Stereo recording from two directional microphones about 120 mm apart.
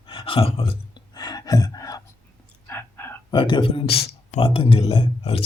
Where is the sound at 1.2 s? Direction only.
35° left (ahead or behind).